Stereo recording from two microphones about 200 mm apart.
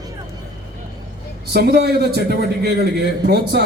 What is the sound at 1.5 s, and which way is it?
A man's voice, 50° right (ahead or behind).